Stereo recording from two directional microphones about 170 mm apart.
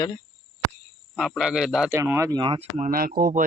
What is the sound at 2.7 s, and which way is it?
Speech, 50° right (ahead or behind).